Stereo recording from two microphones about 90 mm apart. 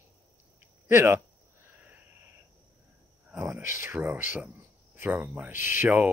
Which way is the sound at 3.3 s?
25° right (ahead or behind).